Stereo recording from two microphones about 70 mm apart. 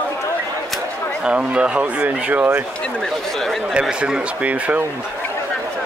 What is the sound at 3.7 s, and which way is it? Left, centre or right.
Speech, centre.